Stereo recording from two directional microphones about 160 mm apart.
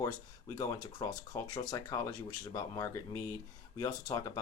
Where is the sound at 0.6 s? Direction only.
25° left (ahead or behind).